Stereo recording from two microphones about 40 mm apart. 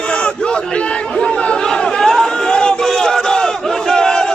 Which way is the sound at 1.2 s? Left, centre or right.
Left.